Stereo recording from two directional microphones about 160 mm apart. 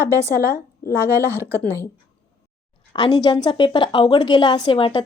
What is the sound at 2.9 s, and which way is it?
A woman's voice, 25° left (ahead or behind).